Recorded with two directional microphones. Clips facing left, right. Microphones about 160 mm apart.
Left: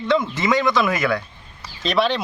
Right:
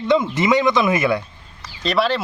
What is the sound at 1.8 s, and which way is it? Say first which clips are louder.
Speech: right 1 dB; 5° right (ahead or behind).